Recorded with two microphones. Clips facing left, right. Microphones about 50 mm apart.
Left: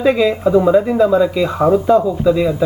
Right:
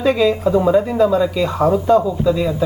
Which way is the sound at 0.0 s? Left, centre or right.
Centre.